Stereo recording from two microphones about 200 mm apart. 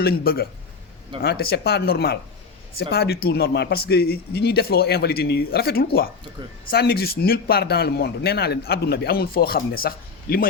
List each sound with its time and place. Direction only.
0.0 s speech: 50° left (ahead or behind)